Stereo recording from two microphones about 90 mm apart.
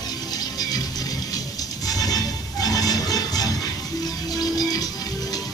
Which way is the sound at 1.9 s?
45° left (ahead or behind).